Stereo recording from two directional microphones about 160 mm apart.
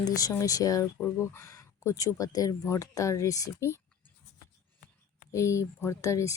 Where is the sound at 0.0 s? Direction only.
25° left (ahead or behind).